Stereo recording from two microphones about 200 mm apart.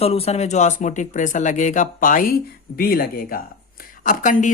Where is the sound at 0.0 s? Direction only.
30° left (ahead or behind).